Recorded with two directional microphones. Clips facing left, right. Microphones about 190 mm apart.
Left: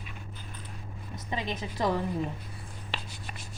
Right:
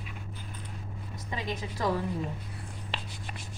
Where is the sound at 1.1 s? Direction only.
20° left (ahead or behind).